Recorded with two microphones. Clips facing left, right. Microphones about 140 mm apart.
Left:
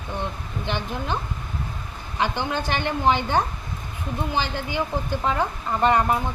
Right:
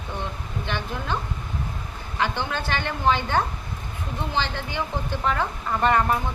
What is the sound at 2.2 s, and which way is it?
Speech, 15° left (ahead or behind).